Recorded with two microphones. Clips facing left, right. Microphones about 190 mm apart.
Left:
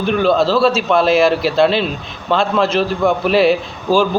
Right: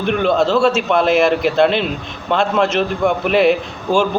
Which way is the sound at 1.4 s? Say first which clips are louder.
Even; 55° right (ahead or behind).